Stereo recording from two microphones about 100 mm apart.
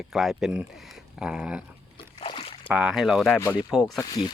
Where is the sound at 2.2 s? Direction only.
80° left.